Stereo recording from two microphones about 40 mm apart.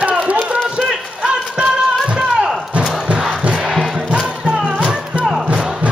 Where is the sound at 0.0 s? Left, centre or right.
Right.